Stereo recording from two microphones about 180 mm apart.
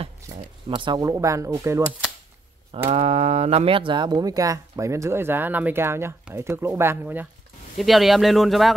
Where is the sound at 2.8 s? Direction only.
35° right (ahead or behind).